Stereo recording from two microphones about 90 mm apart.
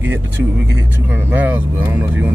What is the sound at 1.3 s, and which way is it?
Speech, 20° right (ahead or behind).